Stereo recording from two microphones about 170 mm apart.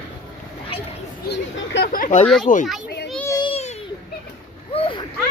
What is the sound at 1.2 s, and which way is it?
A child's voice, 75° left (ahead or behind).